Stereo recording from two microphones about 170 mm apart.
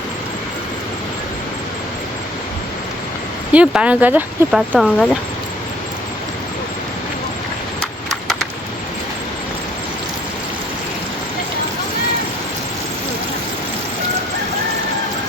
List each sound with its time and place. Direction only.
3.5 s speech: 5° right (ahead or behind)